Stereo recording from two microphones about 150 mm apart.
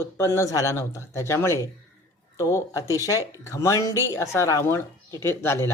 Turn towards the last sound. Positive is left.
turn(degrees=15)  # may be behind; listen again after turning